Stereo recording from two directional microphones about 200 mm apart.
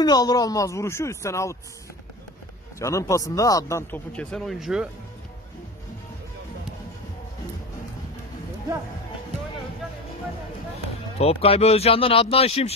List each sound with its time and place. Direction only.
0.0 s speech: 20° left (ahead or behind)
2.8 s speech: 15° left (ahead or behind); by 4.8 s centre (ahead or behind)
11.1 s speech: 30° left (ahead or behind)